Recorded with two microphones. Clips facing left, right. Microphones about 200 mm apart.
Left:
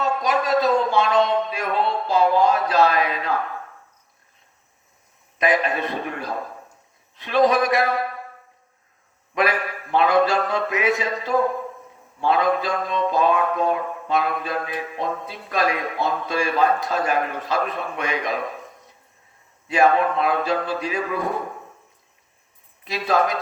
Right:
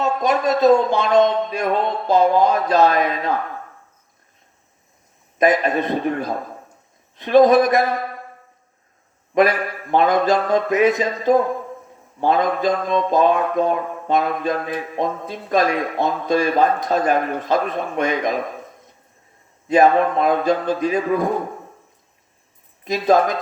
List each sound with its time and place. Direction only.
0.2 s speech: 45° right (ahead or behind)
5.4 s mantra: 45° right (ahead or behind)
9.3 s mantra: 45° right (ahead or behind)
19.6 s mantra: 45° right (ahead or behind)
22.8 s speech: 45° right (ahead or behind)